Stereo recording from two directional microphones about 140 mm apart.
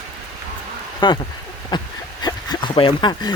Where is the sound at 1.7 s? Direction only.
30° left (ahead or behind).